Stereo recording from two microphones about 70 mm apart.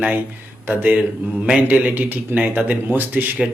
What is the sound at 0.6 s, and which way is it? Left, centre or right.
Speech, right.